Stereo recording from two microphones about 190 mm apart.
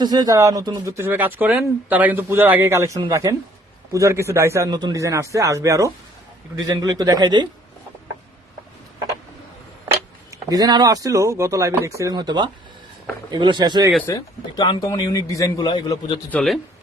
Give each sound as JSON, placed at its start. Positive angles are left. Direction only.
{"t": 0.0, "sound": "speech", "side_deg": -20}
{"t": 10.5, "sound": "speech", "side_deg": -20}
{"t": 14.1, "sound": "speech", "side_deg": 20}
{"t": 16.3, "sound": "a man's voice", "side_deg": 0}